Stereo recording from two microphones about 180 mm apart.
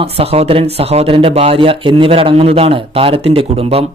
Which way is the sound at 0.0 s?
35° right (ahead or behind).